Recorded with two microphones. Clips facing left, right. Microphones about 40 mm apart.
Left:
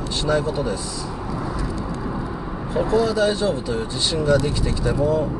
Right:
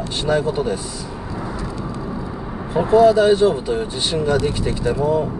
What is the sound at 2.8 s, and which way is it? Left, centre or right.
Speech, right.